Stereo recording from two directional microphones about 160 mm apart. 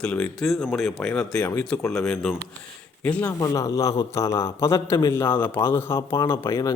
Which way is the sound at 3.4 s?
20° left (ahead or behind).